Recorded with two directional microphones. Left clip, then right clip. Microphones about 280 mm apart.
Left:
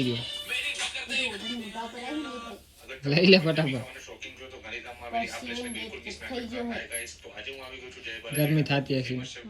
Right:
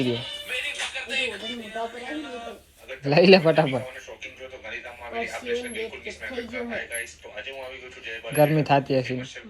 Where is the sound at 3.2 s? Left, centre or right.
Centre.